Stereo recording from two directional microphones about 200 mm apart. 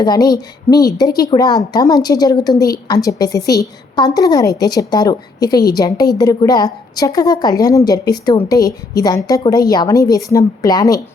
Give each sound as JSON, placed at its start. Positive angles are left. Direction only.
{"t": 0.0, "sound": "a woman's voice", "side_deg": 20}